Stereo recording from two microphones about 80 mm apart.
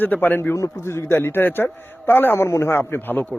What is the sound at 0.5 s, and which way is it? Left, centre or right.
Speech, left.